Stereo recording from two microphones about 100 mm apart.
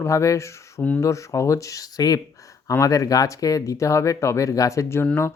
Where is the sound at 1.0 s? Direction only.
30° left (ahead or behind).